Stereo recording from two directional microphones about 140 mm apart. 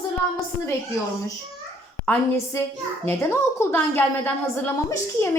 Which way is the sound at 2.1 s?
10° left (ahead or behind).